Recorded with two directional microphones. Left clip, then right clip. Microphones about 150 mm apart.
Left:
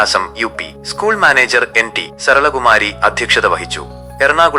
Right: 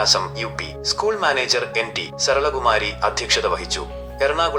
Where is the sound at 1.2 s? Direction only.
45° left (ahead or behind).